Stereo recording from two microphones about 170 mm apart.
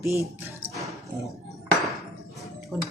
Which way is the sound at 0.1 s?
15° right (ahead or behind).